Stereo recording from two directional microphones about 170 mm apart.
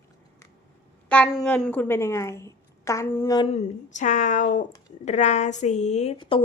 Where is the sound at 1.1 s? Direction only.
5° left (ahead or behind).